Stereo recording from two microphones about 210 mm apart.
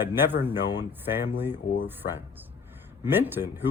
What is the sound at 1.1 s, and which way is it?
Speech, 10° right (ahead or behind).